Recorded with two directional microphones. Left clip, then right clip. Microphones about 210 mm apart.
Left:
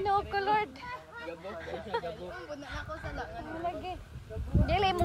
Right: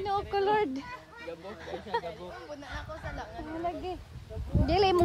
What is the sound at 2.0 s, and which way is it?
Speech, 50° right (ahead or behind).